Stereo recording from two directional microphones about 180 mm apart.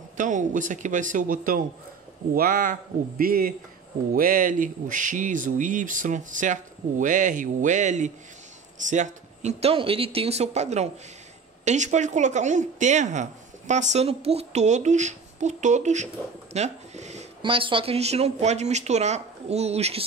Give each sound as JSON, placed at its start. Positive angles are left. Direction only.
{"t": 0.2, "sound": "speech", "side_deg": -45}
{"t": 16.5, "sound": "a sound", "side_deg": -40}
{"t": 17.4, "sound": "speech", "side_deg": -30}